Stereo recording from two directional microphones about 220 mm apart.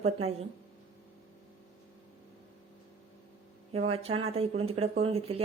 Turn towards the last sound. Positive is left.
turn(degrees=-25)  # may be behind; listen again after turning